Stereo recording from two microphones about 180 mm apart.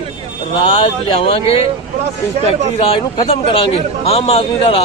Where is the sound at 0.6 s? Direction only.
35° left (ahead or behind).